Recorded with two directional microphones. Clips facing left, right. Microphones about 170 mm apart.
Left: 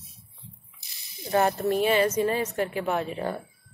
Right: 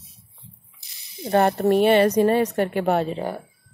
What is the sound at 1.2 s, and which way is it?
Speech, 60° right (ahead or behind).